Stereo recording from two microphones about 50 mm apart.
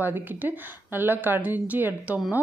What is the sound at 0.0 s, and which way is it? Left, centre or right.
Speech, right.